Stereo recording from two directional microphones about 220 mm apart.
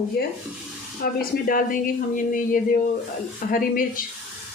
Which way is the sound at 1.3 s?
40° left (ahead or behind).